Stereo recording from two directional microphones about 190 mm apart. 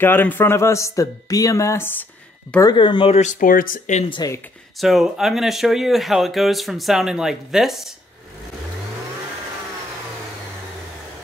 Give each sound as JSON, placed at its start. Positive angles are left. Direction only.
{"t": 0.0, "sound": "speech", "side_deg": 10}
{"t": 2.6, "sound": "speech", "side_deg": 25}
{"t": 4.1, "sound": "speech", "side_deg": 20}
{"t": 4.7, "sound": "speech", "side_deg": 0}